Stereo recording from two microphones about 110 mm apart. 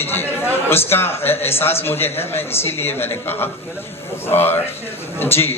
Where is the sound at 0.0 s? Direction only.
20° left (ahead or behind).